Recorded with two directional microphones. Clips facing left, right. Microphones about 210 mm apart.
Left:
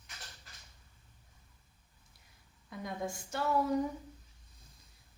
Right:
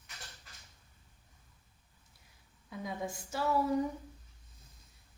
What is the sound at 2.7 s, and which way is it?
A woman's voice, centre (ahead or behind).